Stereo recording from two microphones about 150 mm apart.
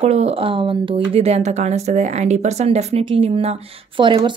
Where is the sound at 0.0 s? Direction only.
45° right (ahead or behind).